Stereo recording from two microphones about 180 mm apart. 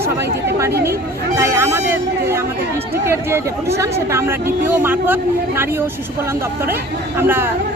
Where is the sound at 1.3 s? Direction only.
10° right (ahead or behind).